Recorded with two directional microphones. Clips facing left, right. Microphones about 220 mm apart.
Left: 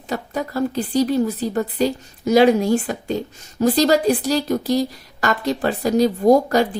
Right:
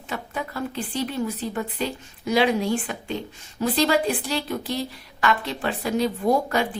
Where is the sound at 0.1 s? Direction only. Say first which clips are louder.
Left 7 dB; 40° left (ahead or behind).